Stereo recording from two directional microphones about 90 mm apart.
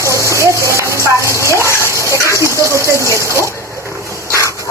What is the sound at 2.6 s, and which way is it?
Speech, 35° right (ahead or behind).